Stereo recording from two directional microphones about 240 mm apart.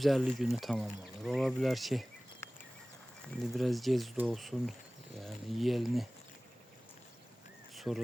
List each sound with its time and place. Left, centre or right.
0.0 s speech: centre
3.5 s speech: centre
7.8 s speech: centre